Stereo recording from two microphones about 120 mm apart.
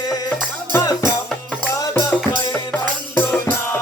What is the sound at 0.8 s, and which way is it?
Music, 30° left (ahead or behind).